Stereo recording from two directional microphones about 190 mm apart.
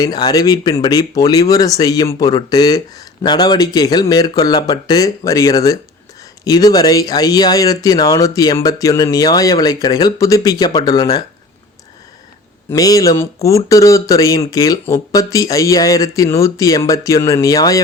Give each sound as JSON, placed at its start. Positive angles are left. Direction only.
{"t": 0.0, "sound": "speech", "side_deg": 20}
{"t": 12.7, "sound": "speech", "side_deg": 20}